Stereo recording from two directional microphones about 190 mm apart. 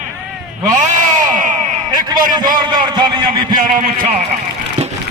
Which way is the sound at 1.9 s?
20° right (ahead or behind).